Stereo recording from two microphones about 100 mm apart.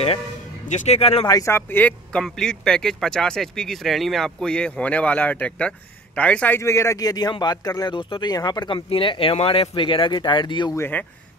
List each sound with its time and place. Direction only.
0.8 s speech: 85° left
1.4 s speech: 25° left (ahead or behind)
2.1 s speech: 5° left (ahead or behind)
6.6 s speech: 30° left (ahead or behind)
7.8 s speech: 55° left (ahead or behind)